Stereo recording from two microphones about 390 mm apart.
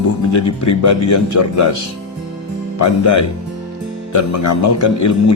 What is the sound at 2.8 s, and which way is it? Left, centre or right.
Speech, left.